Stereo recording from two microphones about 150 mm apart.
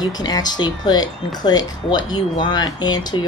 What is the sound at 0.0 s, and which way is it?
Speech, 25° left (ahead or behind).